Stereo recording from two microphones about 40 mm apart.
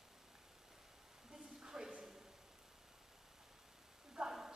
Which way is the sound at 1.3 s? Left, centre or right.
Centre.